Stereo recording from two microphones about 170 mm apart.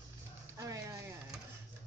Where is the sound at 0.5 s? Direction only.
20° right (ahead or behind).